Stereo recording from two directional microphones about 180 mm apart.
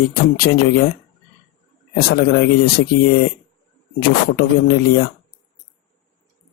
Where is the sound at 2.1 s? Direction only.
55° left (ahead or behind).